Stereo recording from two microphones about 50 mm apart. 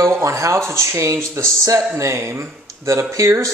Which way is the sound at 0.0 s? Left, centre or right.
Right.